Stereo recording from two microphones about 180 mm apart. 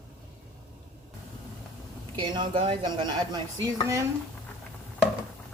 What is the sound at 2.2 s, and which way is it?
Speech, 30° right (ahead or behind).